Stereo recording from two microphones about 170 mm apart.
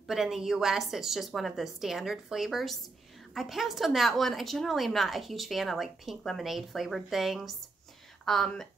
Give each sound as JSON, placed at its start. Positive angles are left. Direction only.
{"t": 0.0, "sound": "a woman's voice", "side_deg": 0}